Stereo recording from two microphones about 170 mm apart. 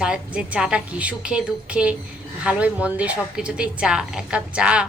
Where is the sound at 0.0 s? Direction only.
5° right (ahead or behind).